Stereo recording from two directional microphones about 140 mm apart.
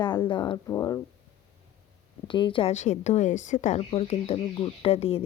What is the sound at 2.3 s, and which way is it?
Speech, 35° left (ahead or behind).